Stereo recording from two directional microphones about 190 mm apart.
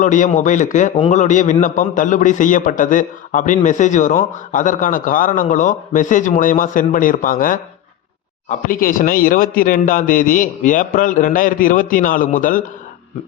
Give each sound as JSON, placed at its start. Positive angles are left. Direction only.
{"t": 0.0, "sound": "a man's voice", "side_deg": 40}